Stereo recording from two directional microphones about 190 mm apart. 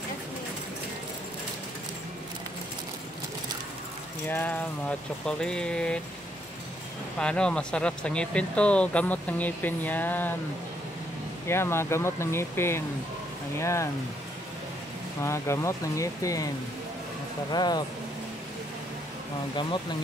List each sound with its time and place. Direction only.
4.3 s speech: 10° left (ahead or behind)
7.2 s speech: 5° left (ahead or behind)
11.4 s speech: 15° left (ahead or behind)
15.2 s speech: 15° left (ahead or behind)
17.5 s speech: 20° left (ahead or behind)